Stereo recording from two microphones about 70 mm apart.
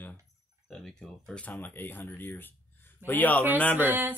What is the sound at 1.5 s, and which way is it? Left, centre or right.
Speech, left.